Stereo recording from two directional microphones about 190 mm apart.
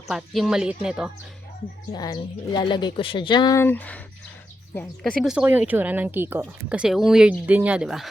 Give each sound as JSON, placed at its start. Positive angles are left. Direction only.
{"t": 0.1, "sound": "speech", "side_deg": 0}
{"t": 1.9, "sound": "speech", "side_deg": 20}